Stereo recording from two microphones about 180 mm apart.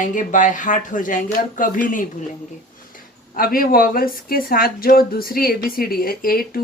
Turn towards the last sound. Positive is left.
turn(degrees=55)  # may be behind; listen again after turning